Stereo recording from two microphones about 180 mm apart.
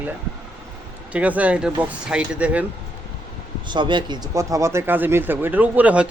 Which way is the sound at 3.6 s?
25° right (ahead or behind).